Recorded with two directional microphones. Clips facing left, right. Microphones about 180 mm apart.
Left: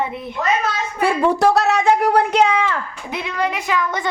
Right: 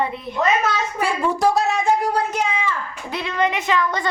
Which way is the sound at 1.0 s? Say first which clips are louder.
Left 5 dB; 60° left (ahead or behind).